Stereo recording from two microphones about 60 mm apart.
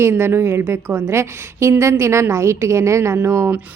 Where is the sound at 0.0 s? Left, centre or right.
Right.